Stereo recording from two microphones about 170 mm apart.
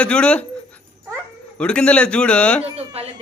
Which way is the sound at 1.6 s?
5° left (ahead or behind).